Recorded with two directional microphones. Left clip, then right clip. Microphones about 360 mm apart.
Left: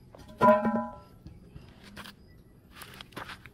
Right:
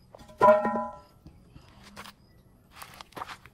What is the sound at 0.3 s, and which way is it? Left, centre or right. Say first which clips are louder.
Music: right 2 dB; right.